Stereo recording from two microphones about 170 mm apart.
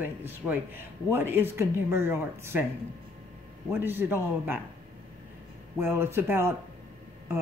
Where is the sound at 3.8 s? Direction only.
15° right (ahead or behind).